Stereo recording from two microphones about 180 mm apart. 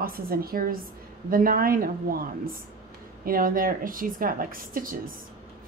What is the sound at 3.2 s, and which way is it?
Speech, 50° right (ahead or behind).